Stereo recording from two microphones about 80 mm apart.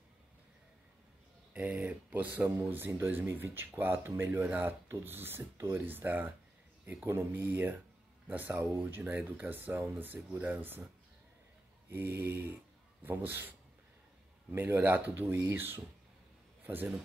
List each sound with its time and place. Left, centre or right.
1.5 s speech: centre
11.9 s speech: right